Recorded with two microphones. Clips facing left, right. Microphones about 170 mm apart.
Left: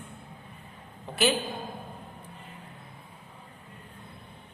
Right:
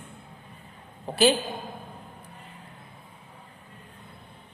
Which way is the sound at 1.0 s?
35° right (ahead or behind).